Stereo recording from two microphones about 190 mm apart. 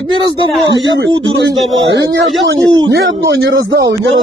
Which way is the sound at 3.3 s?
75° right (ahead or behind).